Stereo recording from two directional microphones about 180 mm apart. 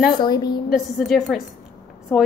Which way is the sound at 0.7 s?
Centre (ahead or behind).